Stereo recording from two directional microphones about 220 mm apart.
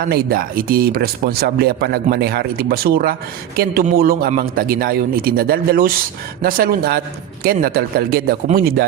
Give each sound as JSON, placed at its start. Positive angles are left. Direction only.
{"t": 0.0, "sound": "a man's voice", "side_deg": -45}